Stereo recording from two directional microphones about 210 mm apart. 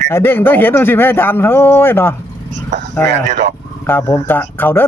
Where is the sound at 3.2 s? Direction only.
35° right (ahead or behind).